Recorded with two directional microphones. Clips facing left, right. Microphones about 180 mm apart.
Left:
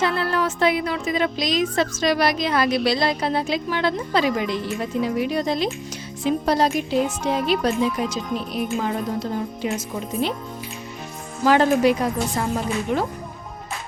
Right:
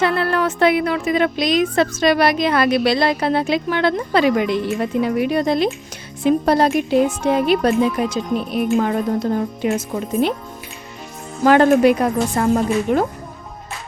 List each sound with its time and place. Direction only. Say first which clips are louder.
0.0 s a woman's voice: right 4 dB; 60° right (ahead or behind)
11.4 s a woman's voice: right 5 dB; 55° right (ahead or behind)